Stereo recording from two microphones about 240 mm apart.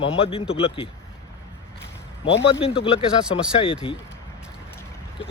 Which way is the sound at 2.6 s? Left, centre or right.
Left.